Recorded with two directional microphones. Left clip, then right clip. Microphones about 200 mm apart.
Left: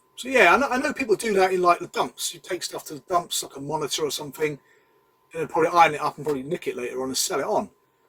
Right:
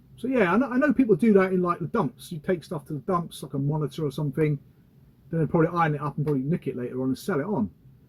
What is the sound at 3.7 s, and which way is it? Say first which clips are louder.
Speech: left 6 dB; 15° left (ahead or behind).